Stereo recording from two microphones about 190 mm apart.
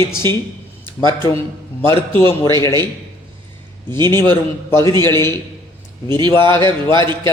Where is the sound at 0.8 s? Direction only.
20° right (ahead or behind).